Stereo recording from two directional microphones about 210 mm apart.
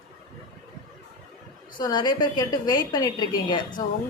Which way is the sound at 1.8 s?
20° left (ahead or behind).